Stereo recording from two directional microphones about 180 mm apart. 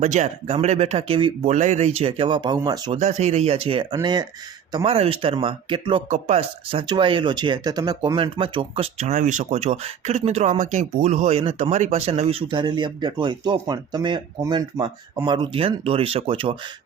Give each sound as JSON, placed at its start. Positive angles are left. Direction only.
{"t": 0.0, "sound": "speech", "side_deg": -40}
{"t": 1.5, "sound": "speech", "side_deg": -40}
{"t": 3.0, "sound": "speech", "side_deg": -40}